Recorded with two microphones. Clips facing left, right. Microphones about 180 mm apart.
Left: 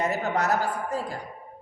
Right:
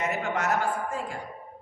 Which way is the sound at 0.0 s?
35° left (ahead or behind).